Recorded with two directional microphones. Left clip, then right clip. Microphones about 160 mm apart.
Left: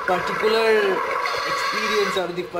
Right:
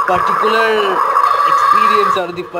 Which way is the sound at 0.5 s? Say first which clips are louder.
Right 5 dB; 25° right (ahead or behind).